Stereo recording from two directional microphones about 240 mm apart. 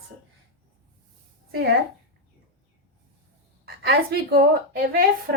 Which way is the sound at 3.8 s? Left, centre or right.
Right.